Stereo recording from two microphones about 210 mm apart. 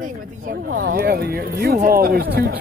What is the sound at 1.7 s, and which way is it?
Speech, 45° right (ahead or behind).